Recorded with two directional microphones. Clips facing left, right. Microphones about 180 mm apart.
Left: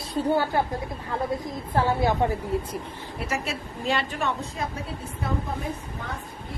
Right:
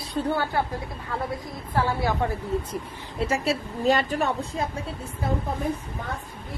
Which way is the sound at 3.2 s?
30° right (ahead or behind).